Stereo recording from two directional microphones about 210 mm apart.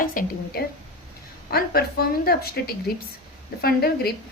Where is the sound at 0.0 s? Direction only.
40° left (ahead or behind).